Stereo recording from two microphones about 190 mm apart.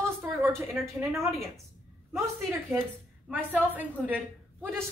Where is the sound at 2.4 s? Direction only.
Centre (ahead or behind).